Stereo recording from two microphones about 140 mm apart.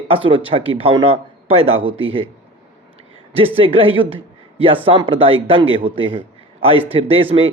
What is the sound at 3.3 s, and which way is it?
A man's voice, 40° right (ahead or behind).